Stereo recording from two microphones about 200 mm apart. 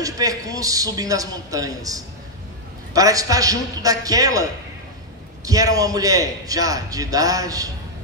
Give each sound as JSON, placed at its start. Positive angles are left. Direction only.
{"t": 0.0, "sound": "a man's voice", "side_deg": -15}